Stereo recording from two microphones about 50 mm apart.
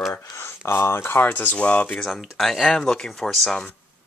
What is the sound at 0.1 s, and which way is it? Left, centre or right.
Speech, left.